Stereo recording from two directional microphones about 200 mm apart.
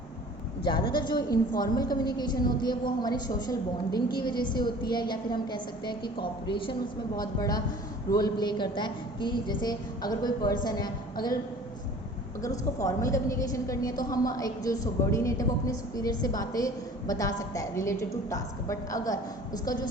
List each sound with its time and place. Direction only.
0.6 s a woman's voice: 20° left (ahead or behind)
12.4 s a woman's voice: 15° left (ahead or behind)